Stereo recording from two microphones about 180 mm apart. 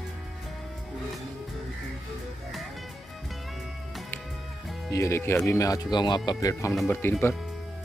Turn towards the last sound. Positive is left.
turn(degrees=15)  # may be behind; listen again after turning